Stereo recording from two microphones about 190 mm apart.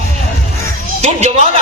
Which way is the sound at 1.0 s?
40° right (ahead or behind).